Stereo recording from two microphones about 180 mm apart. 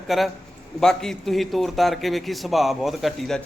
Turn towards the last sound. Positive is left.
turn(degrees=0)  # may be behind; listen again after turning